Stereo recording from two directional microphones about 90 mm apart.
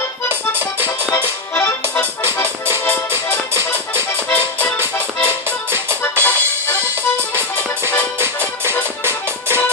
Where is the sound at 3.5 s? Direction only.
30° right (ahead or behind).